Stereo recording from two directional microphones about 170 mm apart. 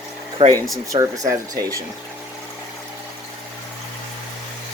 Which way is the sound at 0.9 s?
20° right (ahead or behind).